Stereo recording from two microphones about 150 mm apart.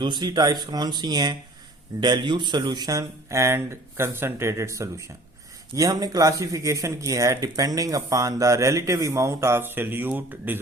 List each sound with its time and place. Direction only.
0.0 s speech: 30° right (ahead or behind); by 10.6 s 10° right (ahead or behind)